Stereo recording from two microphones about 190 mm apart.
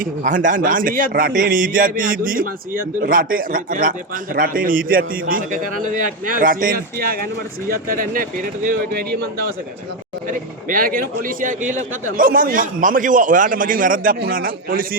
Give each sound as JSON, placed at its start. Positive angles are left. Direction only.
{"t": 0.0, "sound": "a man's voice", "side_deg": -45}
{"t": 10.7, "sound": "a man's voice", "side_deg": -45}